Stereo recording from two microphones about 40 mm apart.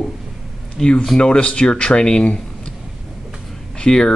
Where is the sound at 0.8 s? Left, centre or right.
Centre.